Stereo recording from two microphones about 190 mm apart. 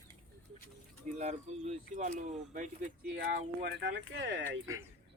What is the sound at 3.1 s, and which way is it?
Speech, 65° right (ahead or behind).